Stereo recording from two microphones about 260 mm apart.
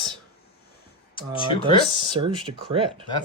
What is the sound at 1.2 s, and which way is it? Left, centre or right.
Speech, centre.